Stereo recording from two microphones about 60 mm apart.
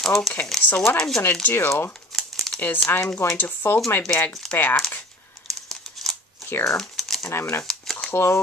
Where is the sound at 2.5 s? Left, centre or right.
Left.